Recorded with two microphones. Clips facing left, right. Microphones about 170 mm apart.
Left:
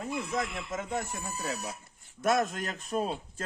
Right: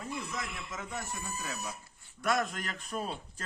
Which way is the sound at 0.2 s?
50° left (ahead or behind).